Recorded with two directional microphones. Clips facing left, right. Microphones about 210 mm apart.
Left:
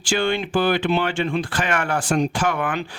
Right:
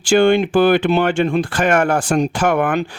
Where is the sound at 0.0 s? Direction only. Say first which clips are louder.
Right 9 dB; 50° right (ahead or behind).